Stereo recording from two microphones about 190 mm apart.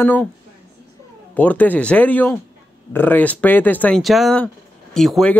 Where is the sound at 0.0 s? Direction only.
10° left (ahead or behind).